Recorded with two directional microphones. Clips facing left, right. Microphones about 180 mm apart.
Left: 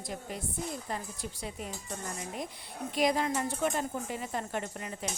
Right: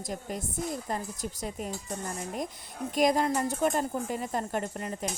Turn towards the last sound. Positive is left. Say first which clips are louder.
# right 4 dB
turn(degrees=-45)  # may be behind; listen again after turning